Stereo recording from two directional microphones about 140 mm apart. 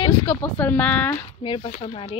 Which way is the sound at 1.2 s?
40° left (ahead or behind).